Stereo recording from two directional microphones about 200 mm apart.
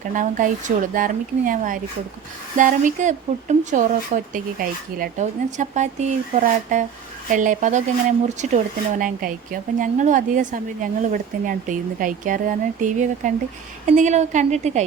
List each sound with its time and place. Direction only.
0.1 s speech: 40° right (ahead or behind)